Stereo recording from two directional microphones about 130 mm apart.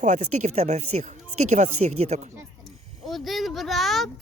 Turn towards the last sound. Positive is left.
turn(degrees=0)  # may be behind; listen again after turning